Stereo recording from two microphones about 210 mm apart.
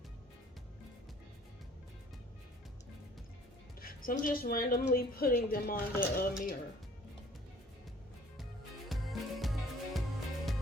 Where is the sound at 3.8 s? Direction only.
45° left (ahead or behind).